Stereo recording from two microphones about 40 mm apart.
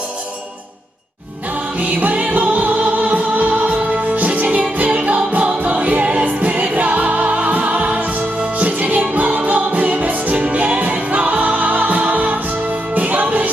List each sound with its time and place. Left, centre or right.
1.8 s music: right
4.4 s music: right
10.3 s music: right